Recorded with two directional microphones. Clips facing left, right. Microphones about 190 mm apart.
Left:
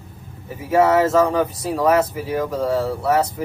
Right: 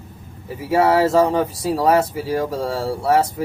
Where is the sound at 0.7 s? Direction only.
30° right (ahead or behind).